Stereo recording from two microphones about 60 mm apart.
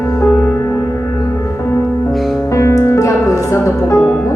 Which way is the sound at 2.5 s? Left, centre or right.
Left.